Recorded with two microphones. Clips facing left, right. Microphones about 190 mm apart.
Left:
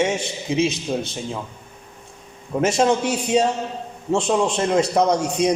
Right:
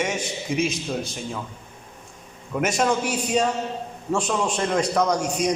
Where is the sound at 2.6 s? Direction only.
25° left (ahead or behind).